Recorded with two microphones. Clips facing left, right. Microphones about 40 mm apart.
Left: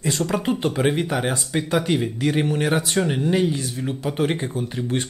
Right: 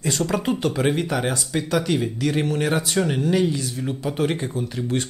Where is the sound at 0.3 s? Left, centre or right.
Centre.